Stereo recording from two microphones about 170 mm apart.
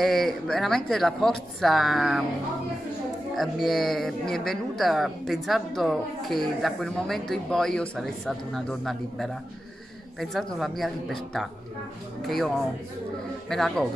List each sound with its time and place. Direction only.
0.0 s a man's voice: centre (ahead or behind)
3.3 s a man's voice: centre (ahead or behind)